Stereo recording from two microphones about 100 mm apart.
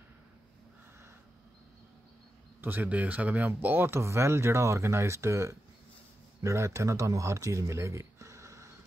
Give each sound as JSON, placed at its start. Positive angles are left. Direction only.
{"t": 2.6, "sound": "speech", "side_deg": -15}